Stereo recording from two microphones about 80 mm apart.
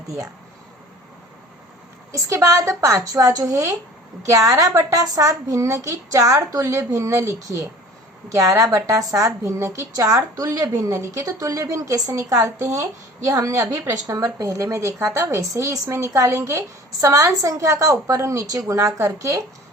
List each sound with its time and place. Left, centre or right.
2.1 s a woman's voice: right